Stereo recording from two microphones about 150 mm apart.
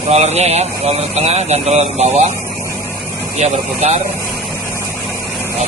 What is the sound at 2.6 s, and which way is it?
Vehicle, 15° left (ahead or behind).